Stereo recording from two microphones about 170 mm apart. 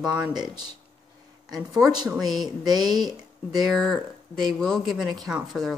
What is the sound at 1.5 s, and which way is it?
Speech, 20° right (ahead or behind).